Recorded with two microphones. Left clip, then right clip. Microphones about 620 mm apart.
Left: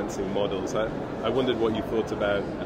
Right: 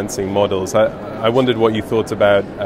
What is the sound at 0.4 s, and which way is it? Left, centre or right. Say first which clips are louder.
Speech: right 13 dB; right.